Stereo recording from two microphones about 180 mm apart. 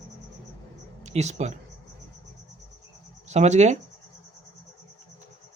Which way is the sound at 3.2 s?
40° right (ahead or behind).